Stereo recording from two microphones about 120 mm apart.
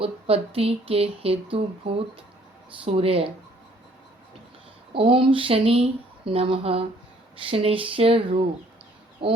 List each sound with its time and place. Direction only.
0.0 s speech: 55° right (ahead or behind)
4.9 s speech: 50° right (ahead or behind)